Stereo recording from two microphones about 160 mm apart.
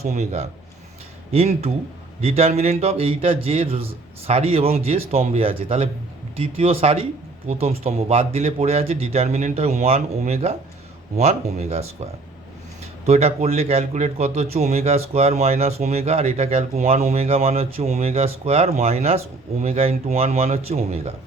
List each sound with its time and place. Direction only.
0.0 s a man's voice: 45° right (ahead or behind)
13.1 s speech: 40° right (ahead or behind)